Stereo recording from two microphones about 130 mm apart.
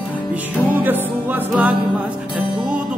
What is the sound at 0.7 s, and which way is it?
Music, 15° right (ahead or behind).